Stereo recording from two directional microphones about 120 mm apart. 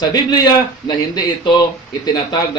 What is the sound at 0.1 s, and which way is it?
A man's voice, 35° left (ahead or behind).